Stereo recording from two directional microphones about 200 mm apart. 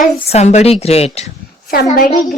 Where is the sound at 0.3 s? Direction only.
35° left (ahead or behind).